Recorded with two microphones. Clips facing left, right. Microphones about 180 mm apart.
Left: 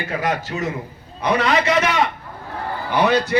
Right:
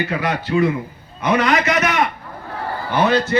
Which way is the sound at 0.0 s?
45° left (ahead or behind).